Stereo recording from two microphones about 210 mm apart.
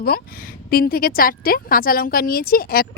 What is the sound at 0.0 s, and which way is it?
A woman's voice, 45° left (ahead or behind).